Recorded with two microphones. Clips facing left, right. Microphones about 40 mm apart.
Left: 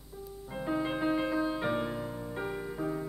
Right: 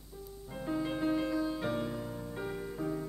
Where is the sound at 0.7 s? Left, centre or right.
Left.